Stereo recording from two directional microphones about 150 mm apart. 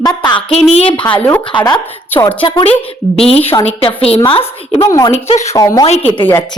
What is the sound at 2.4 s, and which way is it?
A child's voice, 35° left (ahead or behind).